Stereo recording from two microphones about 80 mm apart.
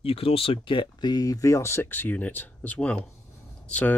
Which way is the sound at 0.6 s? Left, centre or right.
Left.